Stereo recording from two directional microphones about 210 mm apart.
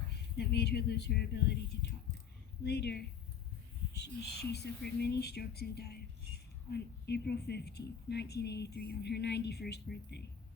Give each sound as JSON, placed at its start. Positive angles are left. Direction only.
{"t": 0.1, "sound": "speech", "side_deg": 50}